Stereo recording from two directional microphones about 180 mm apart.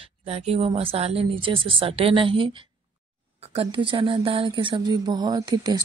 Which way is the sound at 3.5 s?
30° right (ahead or behind).